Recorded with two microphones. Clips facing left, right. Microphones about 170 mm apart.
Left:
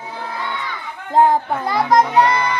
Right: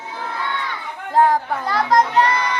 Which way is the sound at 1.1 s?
20° left (ahead or behind).